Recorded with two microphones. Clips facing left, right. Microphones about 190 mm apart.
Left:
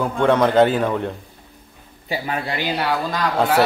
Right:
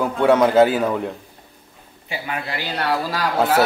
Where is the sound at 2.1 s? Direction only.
35° left (ahead or behind).